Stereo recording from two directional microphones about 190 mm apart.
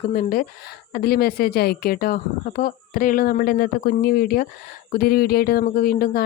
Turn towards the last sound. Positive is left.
turn(degrees=50)  # may be behind; listen again after turning